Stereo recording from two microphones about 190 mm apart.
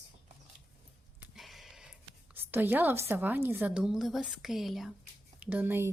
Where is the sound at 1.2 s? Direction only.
Centre (ahead or behind).